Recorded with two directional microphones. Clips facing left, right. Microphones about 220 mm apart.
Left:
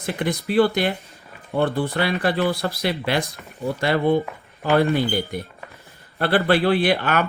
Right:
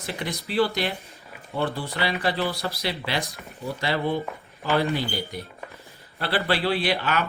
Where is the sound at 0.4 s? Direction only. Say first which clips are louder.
Left 5 dB; 50° left (ahead or behind).